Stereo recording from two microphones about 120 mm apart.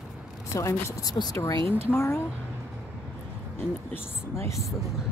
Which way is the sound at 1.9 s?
20° left (ahead or behind).